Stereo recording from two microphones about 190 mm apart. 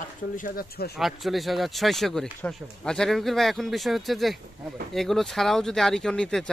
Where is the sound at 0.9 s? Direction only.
Centre (ahead or behind).